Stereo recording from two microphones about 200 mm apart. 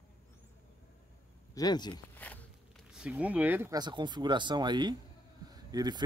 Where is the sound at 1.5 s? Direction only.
20° left (ahead or behind).